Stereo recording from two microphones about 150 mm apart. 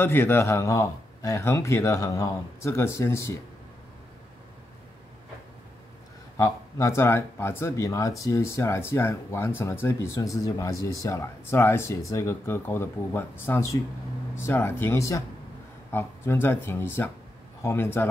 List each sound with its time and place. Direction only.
0.0 s a man's voice: 15° left (ahead or behind)
6.3 s speech: 20° left (ahead or behind)